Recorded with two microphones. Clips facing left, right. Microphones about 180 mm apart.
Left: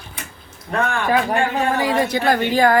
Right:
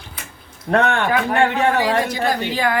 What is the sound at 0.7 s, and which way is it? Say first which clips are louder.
Speech: right 2 dB; 70° right (ahead or behind).